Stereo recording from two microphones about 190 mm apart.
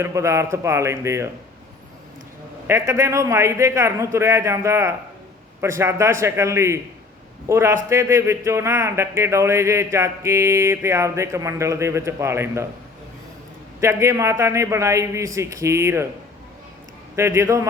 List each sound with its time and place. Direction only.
0.0 s a man's voice: 15° right (ahead or behind)
2.6 s a man's voice: 15° right (ahead or behind)
13.8 s a man's voice: 15° right (ahead or behind)
17.2 s a man's voice: 15° right (ahead or behind)